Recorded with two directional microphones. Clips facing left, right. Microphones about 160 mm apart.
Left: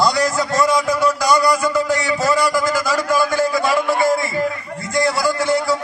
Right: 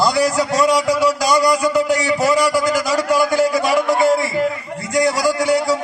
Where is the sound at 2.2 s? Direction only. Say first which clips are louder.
Right 1 dB; 20° right (ahead or behind).